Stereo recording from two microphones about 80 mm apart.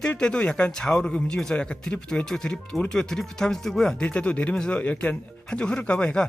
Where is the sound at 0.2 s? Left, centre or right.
Centre.